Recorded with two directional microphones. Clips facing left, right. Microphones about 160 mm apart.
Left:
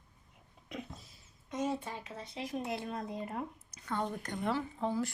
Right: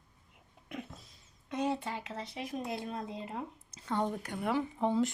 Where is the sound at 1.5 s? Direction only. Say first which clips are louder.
Right 2 dB; 70° right (ahead or behind); by 2.3 s 85° right.